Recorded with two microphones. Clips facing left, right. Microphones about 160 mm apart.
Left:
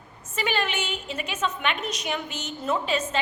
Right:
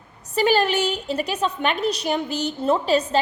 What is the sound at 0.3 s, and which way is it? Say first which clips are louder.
A woman's voice: right 8 dB; 35° right (ahead or behind).